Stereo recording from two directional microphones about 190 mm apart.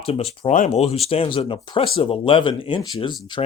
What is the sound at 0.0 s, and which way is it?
Speech, 30° left (ahead or behind).